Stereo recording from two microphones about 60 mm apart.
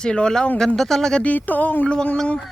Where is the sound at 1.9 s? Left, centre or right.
Centre.